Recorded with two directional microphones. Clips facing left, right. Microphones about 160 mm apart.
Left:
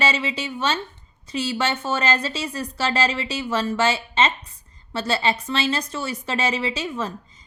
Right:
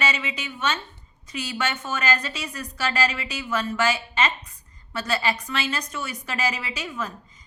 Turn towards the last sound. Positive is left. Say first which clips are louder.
# left 6 dB
turn(degrees=30)  # may be behind; listen again after turning